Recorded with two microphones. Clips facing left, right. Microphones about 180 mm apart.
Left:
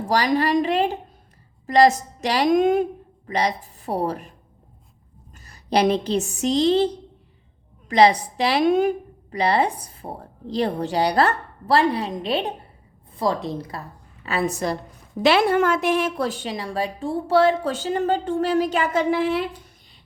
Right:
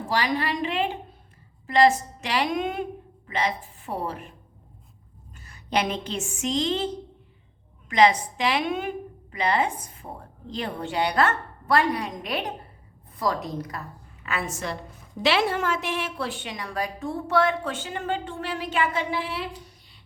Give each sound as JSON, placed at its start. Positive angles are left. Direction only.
{"t": 0.0, "sound": "a woman's voice", "side_deg": 40}
{"t": 5.5, "sound": "a woman's voice", "side_deg": 35}
{"t": 15.2, "sound": "a woman's voice", "side_deg": 50}